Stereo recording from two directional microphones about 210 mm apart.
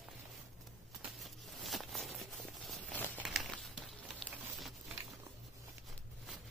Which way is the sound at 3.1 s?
Centre (ahead or behind).